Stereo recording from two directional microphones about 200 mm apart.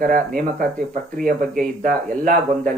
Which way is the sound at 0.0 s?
45° right (ahead or behind).